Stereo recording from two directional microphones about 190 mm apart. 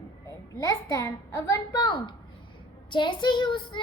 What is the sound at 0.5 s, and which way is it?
A child's voice, 15° left (ahead or behind).